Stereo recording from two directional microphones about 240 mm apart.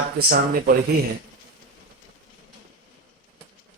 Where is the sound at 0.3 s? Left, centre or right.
Right.